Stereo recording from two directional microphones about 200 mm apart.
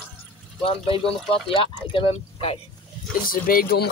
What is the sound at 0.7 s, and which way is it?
Speech, 25° left (ahead or behind).